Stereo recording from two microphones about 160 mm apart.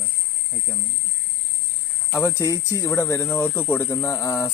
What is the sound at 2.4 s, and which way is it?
Speech, 20° left (ahead or behind).